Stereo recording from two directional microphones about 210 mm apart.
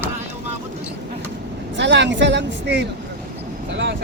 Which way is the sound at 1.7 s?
60° right (ahead or behind).